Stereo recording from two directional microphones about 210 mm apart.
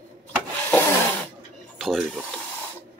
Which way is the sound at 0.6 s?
10° left (ahead or behind).